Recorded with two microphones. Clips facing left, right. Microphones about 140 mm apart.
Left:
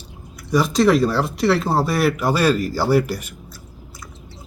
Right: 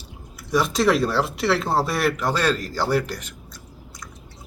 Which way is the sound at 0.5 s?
Centre (ahead or behind).